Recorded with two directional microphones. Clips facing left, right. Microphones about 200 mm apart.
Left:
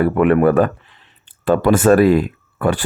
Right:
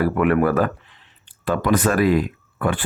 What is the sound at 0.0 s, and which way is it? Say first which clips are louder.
Speech: left 5 dB; 25° left (ahead or behind).